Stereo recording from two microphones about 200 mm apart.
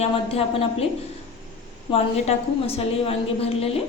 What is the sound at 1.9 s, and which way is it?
A woman's voice, 30° left (ahead or behind).